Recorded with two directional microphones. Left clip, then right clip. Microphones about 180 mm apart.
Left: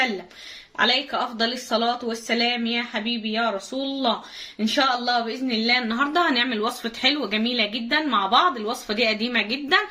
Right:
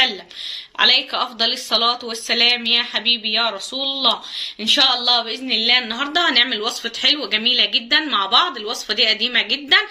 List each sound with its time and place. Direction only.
0.8 s a woman's voice: 35° left (ahead or behind)